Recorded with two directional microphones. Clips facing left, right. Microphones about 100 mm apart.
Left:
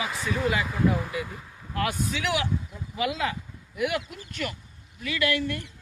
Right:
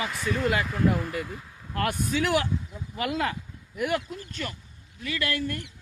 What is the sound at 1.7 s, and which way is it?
Speech, 45° right (ahead or behind).